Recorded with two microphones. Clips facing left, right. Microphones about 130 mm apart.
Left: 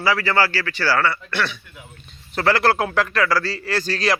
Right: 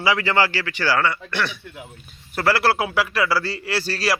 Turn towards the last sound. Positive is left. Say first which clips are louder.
# left 2 dB
turn(degrees=-5)  # may be behind; listen again after turning